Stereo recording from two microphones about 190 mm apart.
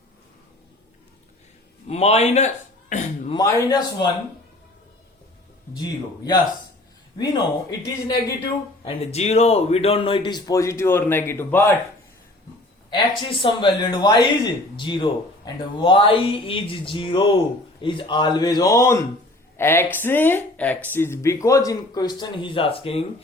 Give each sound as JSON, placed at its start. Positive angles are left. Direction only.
{"t": 1.9, "sound": "a man's voice", "side_deg": 35}
{"t": 2.9, "sound": "a sound", "side_deg": 40}
{"t": 3.3, "sound": "speech", "side_deg": 20}
{"t": 5.8, "sound": "speech", "side_deg": 20}
{"t": 8.0, "sound": "speech", "side_deg": 25}
{"t": 12.9, "sound": "speech", "side_deg": 25}